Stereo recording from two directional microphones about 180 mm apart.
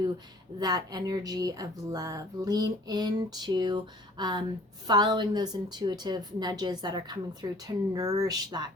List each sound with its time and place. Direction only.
0.6 s speech: 20° right (ahead or behind)